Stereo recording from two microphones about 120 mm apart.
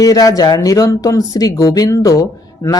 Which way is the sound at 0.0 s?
30° left (ahead or behind).